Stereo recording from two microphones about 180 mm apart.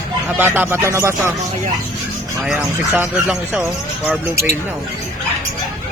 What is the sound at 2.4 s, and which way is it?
Speech, 5° right (ahead or behind).